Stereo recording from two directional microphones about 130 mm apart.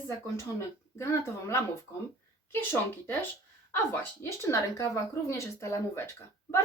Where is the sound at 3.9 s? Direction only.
20° left (ahead or behind).